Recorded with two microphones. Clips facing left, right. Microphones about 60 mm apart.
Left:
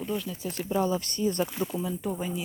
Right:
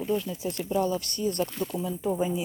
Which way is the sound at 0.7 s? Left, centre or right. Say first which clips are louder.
Even; left.